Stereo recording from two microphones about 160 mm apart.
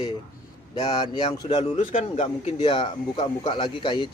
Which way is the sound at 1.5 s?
40° left (ahead or behind).